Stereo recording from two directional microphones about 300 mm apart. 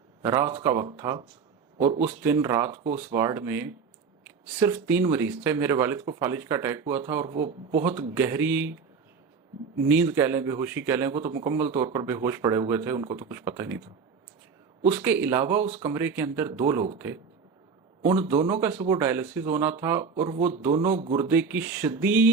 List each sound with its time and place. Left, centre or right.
0.2 s speech: centre
9.9 s speech: centre
14.8 s speech: centre
18.0 s speech: centre
21.2 s speech: centre